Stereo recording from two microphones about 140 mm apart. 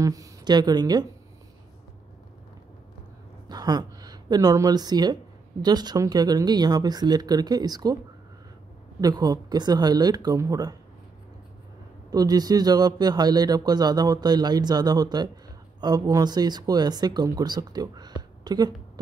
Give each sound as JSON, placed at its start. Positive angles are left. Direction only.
{"t": 0.0, "sound": "speech", "side_deg": -25}
{"t": 3.4, "sound": "speech", "side_deg": -30}
{"t": 9.0, "sound": "a man's voice", "side_deg": -30}
{"t": 12.1, "sound": "a man's voice", "side_deg": -30}
{"t": 18.4, "sound": "a sound", "side_deg": -30}